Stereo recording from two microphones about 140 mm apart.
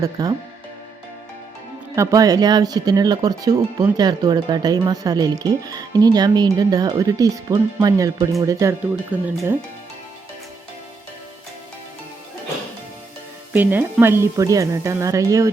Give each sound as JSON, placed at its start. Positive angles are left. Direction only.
{"t": 0.0, "sound": "speech", "side_deg": -25}
{"t": 2.0, "sound": "speech", "side_deg": -25}
{"t": 9.1, "sound": "speech", "side_deg": -10}
{"t": 13.5, "sound": "speech", "side_deg": -15}